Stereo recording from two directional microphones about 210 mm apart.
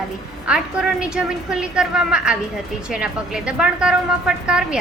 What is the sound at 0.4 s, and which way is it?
A woman's voice, 5° right (ahead or behind).